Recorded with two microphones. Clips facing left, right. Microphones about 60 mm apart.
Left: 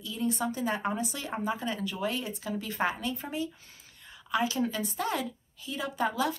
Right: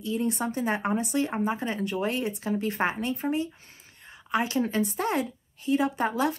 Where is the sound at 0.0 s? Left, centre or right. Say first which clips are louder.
Right 3 dB; right.